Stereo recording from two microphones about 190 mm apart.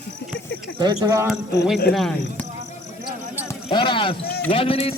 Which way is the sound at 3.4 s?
25° left (ahead or behind).